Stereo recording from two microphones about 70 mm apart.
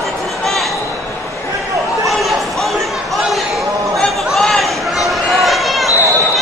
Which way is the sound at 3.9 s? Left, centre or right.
Centre.